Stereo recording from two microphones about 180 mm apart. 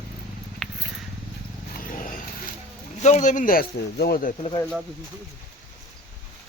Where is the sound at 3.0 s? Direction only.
40° left (ahead or behind).